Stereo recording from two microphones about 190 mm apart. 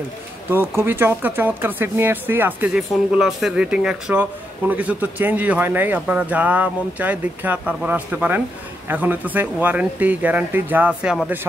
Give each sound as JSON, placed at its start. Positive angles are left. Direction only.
{"t": 0.5, "sound": "speech", "side_deg": -10}